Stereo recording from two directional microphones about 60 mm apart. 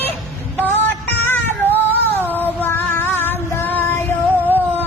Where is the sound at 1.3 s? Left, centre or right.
Left.